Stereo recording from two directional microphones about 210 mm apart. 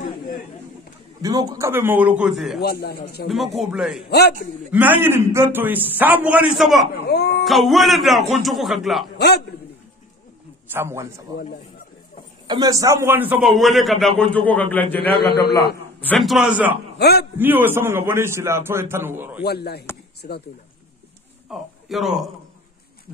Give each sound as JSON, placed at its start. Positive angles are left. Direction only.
{"t": 1.2, "sound": "a man's voice", "side_deg": -15}
{"t": 2.6, "sound": "speech", "side_deg": 50}
{"t": 3.7, "sound": "a man's voice", "side_deg": -5}
{"t": 4.1, "sound": "speech", "side_deg": 50}
{"t": 4.6, "sound": "a man's voice", "side_deg": -10}
{"t": 7.1, "sound": "speech", "side_deg": 50}
{"t": 7.4, "sound": "a man's voice", "side_deg": 0}
{"t": 10.7, "sound": "a man's voice", "side_deg": -10}
{"t": 12.4, "sound": "a man's voice", "side_deg": -20}
{"t": 17.0, "sound": "speech", "side_deg": 50}
{"t": 17.4, "sound": "a man's voice", "side_deg": -10}
{"t": 19.4, "sound": "speech", "side_deg": 50}
{"t": 21.5, "sound": "speech", "side_deg": 0}